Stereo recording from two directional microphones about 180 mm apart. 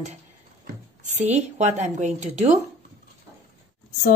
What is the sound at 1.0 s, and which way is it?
Speech, 40° right (ahead or behind).